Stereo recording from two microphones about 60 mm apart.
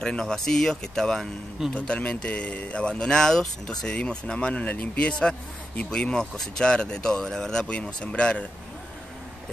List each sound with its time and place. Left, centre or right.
0.0 s speech: centre
1.7 s speech: left